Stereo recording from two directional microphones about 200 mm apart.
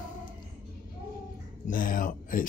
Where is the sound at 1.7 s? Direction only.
45° left (ahead or behind).